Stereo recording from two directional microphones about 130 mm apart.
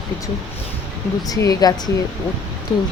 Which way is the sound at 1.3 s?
30° left (ahead or behind).